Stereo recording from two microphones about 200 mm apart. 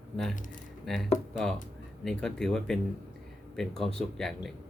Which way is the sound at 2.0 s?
5° left (ahead or behind).